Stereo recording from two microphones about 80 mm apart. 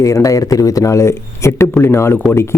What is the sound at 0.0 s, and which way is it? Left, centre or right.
Speech, left.